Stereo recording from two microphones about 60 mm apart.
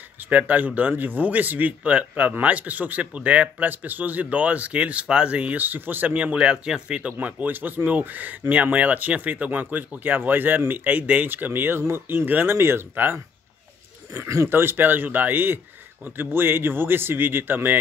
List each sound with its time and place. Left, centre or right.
0.3 s speech: right
7.2 s a man's voice: right
14.1 s speech: right
14.5 s a man's voice: right